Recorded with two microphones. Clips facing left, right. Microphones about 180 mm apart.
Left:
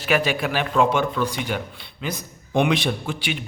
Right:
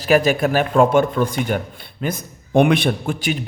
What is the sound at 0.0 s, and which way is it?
Speech, 40° right (ahead or behind).